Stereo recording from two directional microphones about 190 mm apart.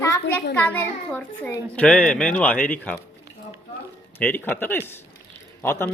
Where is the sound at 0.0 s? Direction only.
15° left (ahead or behind).